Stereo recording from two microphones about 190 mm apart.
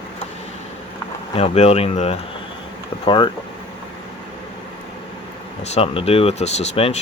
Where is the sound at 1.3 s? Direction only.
35° left (ahead or behind).